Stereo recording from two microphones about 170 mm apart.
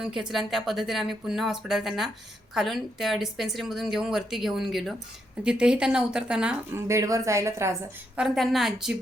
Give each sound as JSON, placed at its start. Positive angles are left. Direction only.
{"t": 0.0, "sound": "a woman's voice", "side_deg": -5}
{"t": 6.8, "sound": "a woman's voice", "side_deg": -20}
{"t": 8.1, "sound": "a woman's voice", "side_deg": 0}